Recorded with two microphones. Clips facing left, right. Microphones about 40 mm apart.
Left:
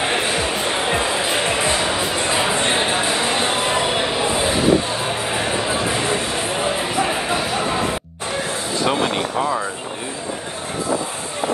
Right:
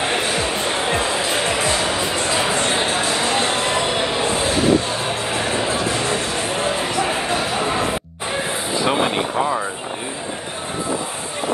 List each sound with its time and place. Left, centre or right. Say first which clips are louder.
0.0 s music: even; centre
1.6 s music: even; left
2.1 s a sound: even; centre
5.7 s music: even; centre
8.7 s vehicle: right 1 dB; centre
9.1 s vehicle: right 1 dB; centre